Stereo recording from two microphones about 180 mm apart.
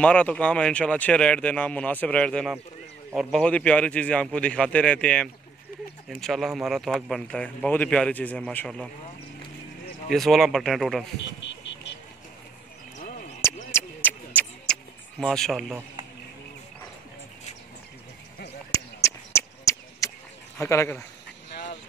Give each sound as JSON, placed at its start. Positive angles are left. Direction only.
{"t": 0.0, "sound": "speech", "side_deg": 5}
{"t": 10.0, "sound": "speech", "side_deg": 0}
{"t": 11.1, "sound": "vehicle", "side_deg": 75}
{"t": 13.7, "sound": "a sound", "side_deg": 10}
{"t": 15.1, "sound": "speech", "side_deg": 0}
{"t": 18.7, "sound": "a sound", "side_deg": 15}
{"t": 20.5, "sound": "speech", "side_deg": 15}